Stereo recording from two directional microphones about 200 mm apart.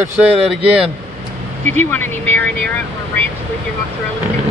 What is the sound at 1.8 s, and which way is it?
Speech, 10° left (ahead or behind).